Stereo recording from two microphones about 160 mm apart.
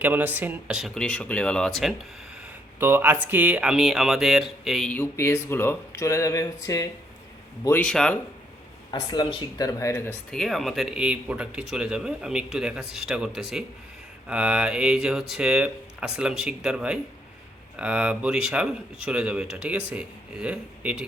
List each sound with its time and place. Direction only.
0.0 s speech: 10° right (ahead or behind)
2.8 s speech: 15° right (ahead or behind); by 5.0 s 5° left (ahead or behind)
5.1 s speech: 15° left (ahead or behind)
7.6 s speech: 10° left (ahead or behind)
8.9 s speech: 30° left (ahead or behind)
10.3 s speech: centre (ahead or behind)